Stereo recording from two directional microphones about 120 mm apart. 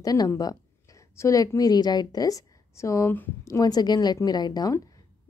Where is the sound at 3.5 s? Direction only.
35° left (ahead or behind).